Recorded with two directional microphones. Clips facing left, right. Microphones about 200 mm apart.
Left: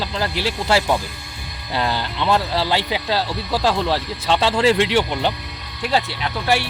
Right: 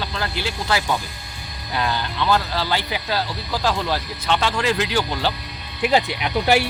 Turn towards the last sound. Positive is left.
turn(degrees=-15)  # may be behind; listen again after turning